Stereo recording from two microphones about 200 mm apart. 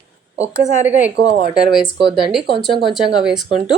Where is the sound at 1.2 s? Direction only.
35° right (ahead or behind).